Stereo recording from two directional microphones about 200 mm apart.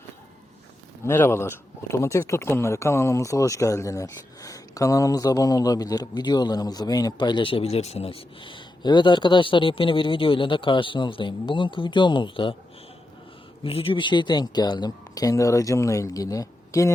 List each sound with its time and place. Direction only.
1.0 s speech: 10° left (ahead or behind)
13.7 s speech: 25° left (ahead or behind)